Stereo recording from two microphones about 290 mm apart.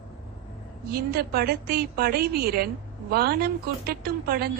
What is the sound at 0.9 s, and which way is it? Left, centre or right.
A woman's voice, right.